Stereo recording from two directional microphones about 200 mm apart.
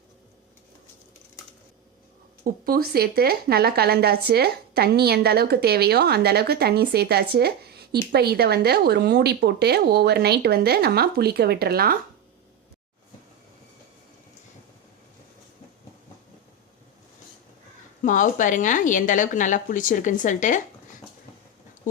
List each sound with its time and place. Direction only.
2.4 s a woman's voice: 45° right (ahead or behind)
18.0 s a woman's voice: 40° left (ahead or behind)